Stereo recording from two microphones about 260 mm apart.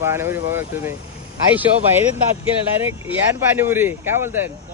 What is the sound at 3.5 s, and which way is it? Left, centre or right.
Speech, centre.